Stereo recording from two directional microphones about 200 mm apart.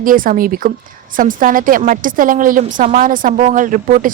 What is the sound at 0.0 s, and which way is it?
Speech, 45° right (ahead or behind).